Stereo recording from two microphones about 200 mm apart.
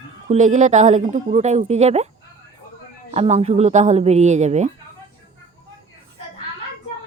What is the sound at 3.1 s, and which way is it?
Speech, 30° right (ahead or behind).